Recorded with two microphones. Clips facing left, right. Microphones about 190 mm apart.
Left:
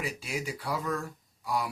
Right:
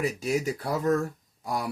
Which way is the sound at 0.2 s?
45° right (ahead or behind).